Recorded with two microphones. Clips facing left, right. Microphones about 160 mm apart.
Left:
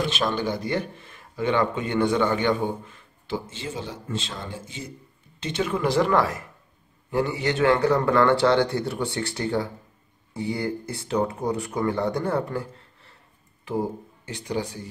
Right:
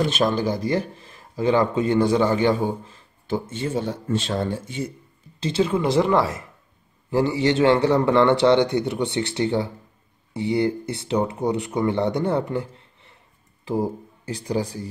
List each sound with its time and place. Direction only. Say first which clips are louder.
0.1 s speech: right 4 dB; 40° right (ahead or behind)
3.3 s speech: right 6 dB; 55° right (ahead or behind)
5.4 s speech: right 4 dB; 30° right (ahead or behind)
13.7 s speech: right 3 dB; 35° right (ahead or behind)